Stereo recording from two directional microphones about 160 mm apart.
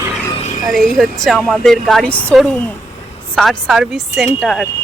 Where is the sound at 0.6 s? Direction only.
Centre (ahead or behind).